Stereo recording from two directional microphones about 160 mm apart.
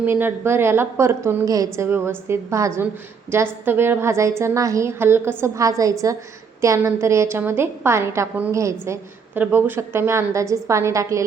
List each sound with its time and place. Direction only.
0.0 s a woman's voice: 10° right (ahead or behind)